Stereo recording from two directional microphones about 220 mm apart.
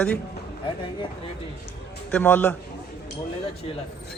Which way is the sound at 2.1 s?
5° left (ahead or behind).